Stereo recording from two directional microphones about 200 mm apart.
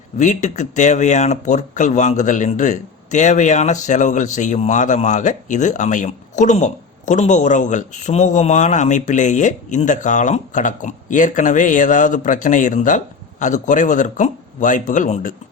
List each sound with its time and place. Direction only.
0.2 s speech: 35° left (ahead or behind)